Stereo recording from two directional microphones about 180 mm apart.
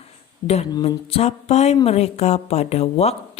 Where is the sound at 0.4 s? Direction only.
35° left (ahead or behind).